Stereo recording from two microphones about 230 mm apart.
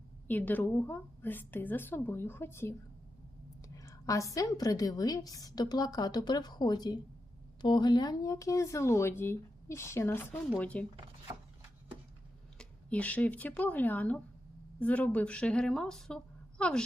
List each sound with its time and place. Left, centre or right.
0.3 s a woman's voice: centre
3.8 s a woman's voice: centre
12.5 s speech: centre